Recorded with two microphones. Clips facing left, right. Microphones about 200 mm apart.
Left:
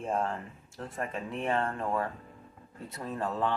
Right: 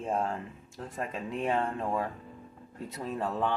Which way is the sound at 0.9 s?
15° right (ahead or behind).